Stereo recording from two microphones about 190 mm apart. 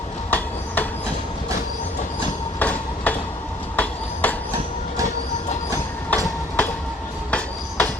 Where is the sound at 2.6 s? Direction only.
10° left (ahead or behind).